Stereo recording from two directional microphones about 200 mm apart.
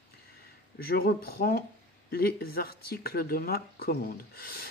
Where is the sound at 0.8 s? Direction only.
50° left (ahead or behind).